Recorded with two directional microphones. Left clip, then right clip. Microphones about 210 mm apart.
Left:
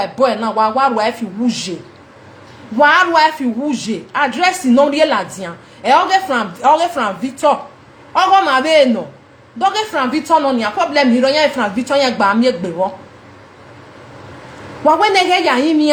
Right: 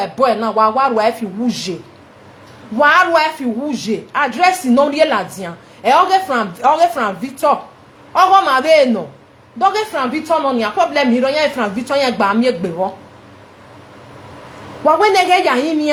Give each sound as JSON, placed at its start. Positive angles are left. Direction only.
{"t": 0.0, "sound": "a woman's voice", "side_deg": -35}
{"t": 2.7, "sound": "a woman's voice", "side_deg": -35}
{"t": 14.8, "sound": "a woman's voice", "side_deg": -30}